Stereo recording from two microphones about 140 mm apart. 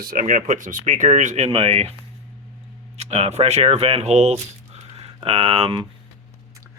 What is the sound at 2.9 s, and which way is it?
Speech, 45° right (ahead or behind).